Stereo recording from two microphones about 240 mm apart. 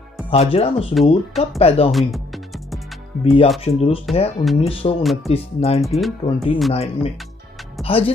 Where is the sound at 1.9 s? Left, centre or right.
Centre.